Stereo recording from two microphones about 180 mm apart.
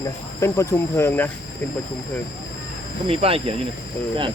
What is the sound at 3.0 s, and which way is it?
Speech, 30° right (ahead or behind).